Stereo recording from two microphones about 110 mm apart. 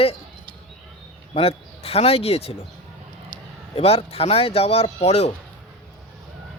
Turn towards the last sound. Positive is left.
turn(degrees=75)  # may be behind; listen again after turning